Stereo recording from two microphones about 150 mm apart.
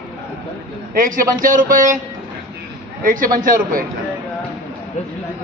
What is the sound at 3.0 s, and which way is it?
Speech, 65° right (ahead or behind).